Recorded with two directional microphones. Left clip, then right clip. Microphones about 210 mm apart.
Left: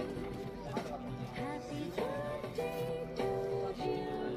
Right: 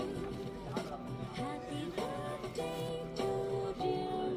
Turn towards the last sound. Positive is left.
turn(degrees=-60)  # may be behind; listen again after turning